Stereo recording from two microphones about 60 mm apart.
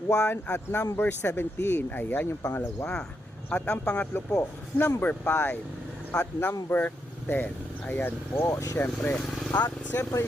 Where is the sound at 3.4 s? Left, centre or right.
Centre.